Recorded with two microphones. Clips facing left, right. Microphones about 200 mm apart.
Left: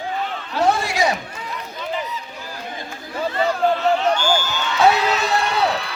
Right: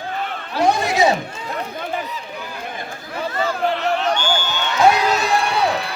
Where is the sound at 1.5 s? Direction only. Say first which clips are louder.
Right 2 dB; 55° right (ahead or behind).